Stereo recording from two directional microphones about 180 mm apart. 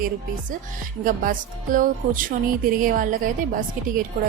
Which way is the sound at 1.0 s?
50° right (ahead or behind).